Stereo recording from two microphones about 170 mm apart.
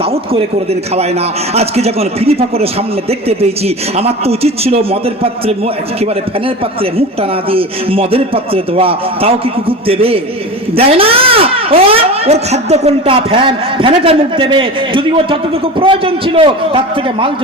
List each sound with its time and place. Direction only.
0.3 s speech: 35° right (ahead or behind)
7.2 s speech: 35° right (ahead or behind)